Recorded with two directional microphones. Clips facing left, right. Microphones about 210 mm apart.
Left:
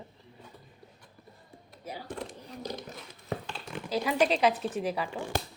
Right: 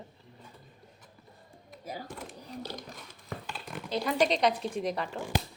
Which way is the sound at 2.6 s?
10° left (ahead or behind).